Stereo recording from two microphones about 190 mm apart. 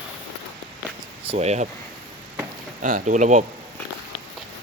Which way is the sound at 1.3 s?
35° right (ahead or behind).